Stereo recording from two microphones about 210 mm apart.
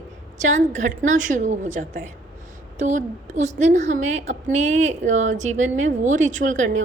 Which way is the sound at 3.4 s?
35° right (ahead or behind).